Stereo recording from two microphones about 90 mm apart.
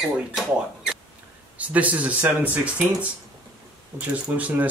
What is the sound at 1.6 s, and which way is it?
Speech, 15° right (ahead or behind).